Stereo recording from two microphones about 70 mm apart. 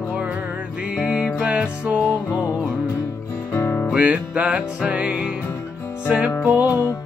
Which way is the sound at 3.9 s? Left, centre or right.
Centre.